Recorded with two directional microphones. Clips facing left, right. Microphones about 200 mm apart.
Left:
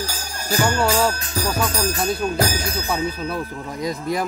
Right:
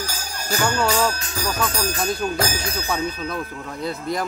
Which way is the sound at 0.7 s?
5° left (ahead or behind).